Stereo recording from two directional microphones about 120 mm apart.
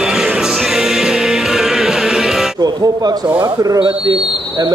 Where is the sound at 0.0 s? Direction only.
5° right (ahead or behind).